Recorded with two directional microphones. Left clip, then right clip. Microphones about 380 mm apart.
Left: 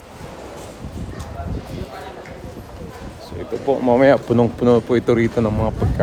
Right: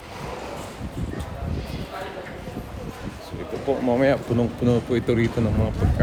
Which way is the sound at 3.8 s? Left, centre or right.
Left.